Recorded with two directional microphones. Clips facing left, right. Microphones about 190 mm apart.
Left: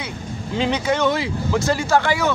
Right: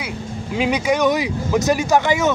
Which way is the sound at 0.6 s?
10° right (ahead or behind).